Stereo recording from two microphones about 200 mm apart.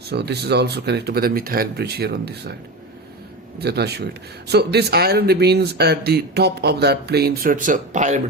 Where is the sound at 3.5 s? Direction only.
55° right (ahead or behind).